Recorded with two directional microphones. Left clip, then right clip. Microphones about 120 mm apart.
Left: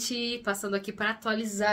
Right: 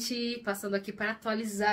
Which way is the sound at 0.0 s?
15° left (ahead or behind).